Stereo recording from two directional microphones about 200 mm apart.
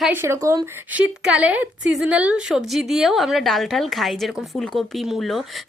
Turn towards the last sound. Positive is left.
turn(degrees=0)  # may be behind; listen again after turning